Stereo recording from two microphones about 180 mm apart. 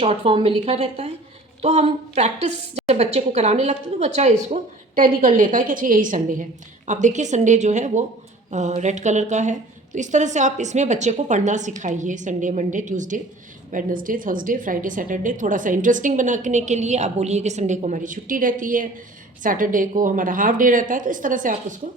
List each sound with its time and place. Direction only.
0.0 s a woman's voice: 30° right (ahead or behind)